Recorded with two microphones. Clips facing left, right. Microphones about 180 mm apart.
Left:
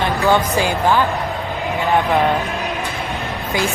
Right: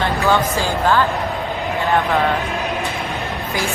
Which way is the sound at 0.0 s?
15° left (ahead or behind).